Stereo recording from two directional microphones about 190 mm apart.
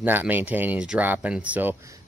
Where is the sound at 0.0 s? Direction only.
10° right (ahead or behind).